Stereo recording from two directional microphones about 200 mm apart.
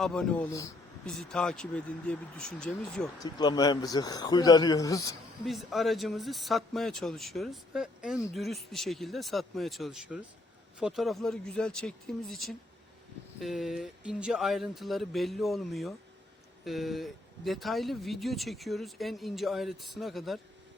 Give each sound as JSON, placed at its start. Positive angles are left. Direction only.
{"t": 0.0, "sound": "speech", "side_deg": 5}
{"t": 3.2, "sound": "speech", "side_deg": 20}
{"t": 5.5, "sound": "speech", "side_deg": 0}